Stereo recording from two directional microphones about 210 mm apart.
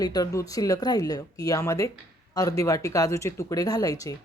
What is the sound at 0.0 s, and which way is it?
A woman's voice, 15° left (ahead or behind).